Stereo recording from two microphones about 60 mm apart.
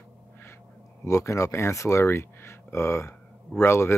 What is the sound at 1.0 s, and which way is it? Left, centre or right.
Speech, left.